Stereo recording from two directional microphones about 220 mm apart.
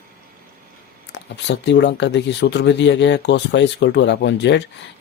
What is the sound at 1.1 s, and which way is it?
Speech, 50° left (ahead or behind).